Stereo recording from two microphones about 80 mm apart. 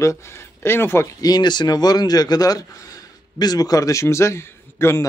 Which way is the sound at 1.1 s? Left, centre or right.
Left.